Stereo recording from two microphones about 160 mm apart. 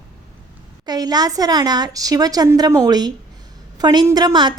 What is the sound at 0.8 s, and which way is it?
A woman's voice, 25° right (ahead or behind).